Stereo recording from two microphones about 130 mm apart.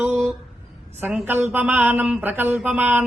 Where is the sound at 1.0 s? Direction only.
15° right (ahead or behind).